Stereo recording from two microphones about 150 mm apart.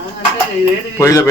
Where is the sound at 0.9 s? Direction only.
15° left (ahead or behind).